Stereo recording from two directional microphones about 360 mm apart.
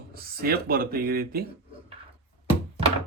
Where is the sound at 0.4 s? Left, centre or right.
Right.